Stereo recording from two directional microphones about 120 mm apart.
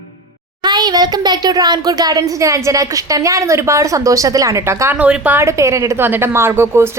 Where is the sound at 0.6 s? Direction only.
35° right (ahead or behind).